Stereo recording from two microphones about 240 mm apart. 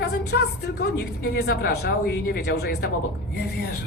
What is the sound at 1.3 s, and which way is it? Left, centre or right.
Speech, left.